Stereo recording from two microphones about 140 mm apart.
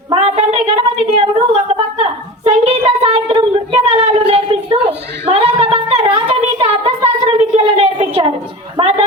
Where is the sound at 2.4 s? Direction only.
40° right (ahead or behind).